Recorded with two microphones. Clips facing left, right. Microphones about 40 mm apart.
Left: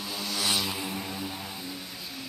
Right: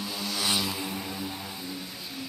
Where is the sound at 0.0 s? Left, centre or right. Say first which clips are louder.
Even; centre.